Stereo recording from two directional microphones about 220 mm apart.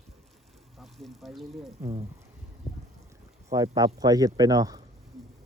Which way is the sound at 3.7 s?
15° right (ahead or behind).